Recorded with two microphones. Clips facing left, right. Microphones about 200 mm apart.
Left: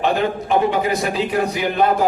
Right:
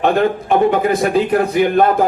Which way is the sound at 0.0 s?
55° right (ahead or behind).